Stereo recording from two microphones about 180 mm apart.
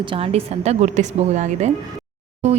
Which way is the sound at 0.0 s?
30° right (ahead or behind).